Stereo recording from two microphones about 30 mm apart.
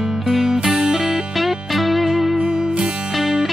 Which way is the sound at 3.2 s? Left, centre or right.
Centre.